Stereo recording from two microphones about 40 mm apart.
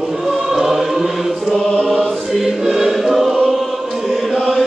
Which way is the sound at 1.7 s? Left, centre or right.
Left.